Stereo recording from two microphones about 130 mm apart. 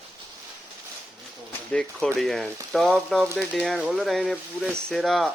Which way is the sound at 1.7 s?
5° left (ahead or behind).